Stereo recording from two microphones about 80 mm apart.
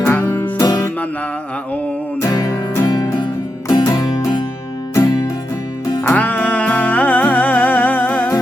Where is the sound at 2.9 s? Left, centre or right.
Left.